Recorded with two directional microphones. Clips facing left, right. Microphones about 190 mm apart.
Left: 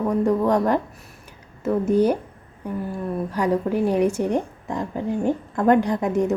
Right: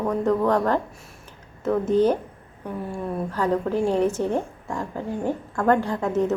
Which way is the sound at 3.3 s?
15° left (ahead or behind).